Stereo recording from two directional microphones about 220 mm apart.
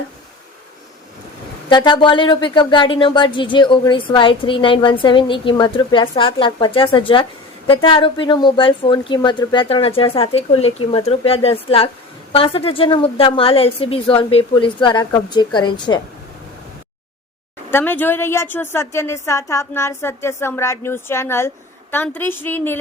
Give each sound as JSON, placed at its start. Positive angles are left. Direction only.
{"t": 1.7, "sound": "speech", "side_deg": 20}
{"t": 17.7, "sound": "a woman's voice", "side_deg": 10}